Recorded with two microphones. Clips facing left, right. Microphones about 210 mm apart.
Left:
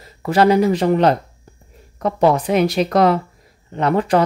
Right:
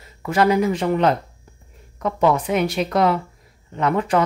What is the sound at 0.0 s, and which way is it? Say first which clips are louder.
Speech: left 4 dB; 35° left (ahead or behind).